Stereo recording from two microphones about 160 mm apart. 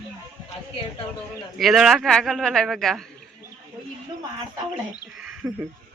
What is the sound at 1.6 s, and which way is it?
A man's voice, centre (ahead or behind).